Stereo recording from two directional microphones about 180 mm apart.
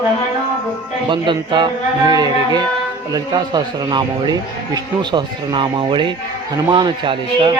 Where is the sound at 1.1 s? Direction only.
25° right (ahead or behind).